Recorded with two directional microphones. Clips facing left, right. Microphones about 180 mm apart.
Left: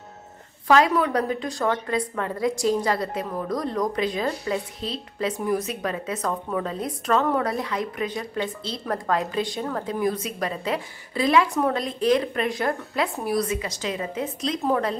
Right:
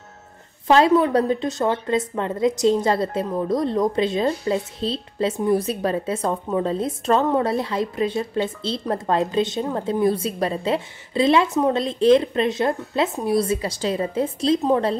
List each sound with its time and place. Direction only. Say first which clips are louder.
0.7 s a woman's voice: right 3 dB; 25° right (ahead or behind)